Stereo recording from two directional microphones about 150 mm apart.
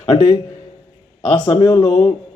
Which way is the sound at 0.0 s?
35° left (ahead or behind).